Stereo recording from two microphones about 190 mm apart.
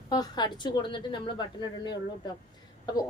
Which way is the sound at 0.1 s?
20° left (ahead or behind).